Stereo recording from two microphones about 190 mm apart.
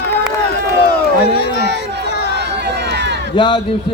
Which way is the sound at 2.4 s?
60° right (ahead or behind).